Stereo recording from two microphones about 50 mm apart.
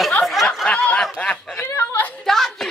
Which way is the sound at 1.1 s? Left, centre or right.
Left.